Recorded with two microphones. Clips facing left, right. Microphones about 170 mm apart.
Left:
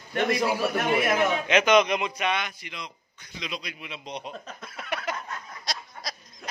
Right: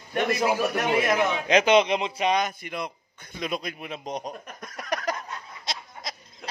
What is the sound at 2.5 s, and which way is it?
A man's voice, 55° right (ahead or behind).